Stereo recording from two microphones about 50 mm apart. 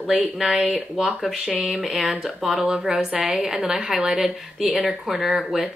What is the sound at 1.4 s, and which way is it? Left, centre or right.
Speech, right.